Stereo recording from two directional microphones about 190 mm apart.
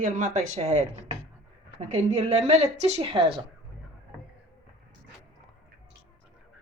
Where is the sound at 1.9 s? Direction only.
35° right (ahead or behind).